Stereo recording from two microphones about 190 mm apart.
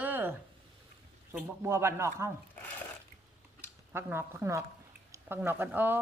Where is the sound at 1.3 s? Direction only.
10° right (ahead or behind).